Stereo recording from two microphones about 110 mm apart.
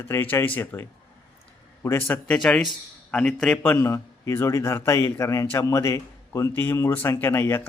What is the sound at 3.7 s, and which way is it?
Speech, 25° left (ahead or behind).